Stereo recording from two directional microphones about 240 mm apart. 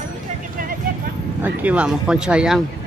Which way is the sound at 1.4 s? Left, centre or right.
Centre.